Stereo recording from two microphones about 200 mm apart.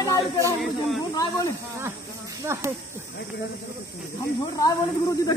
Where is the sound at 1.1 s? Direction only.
20° left (ahead or behind).